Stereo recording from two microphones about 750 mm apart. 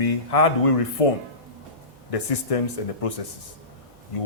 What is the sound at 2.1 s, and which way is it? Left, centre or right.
Speech, left.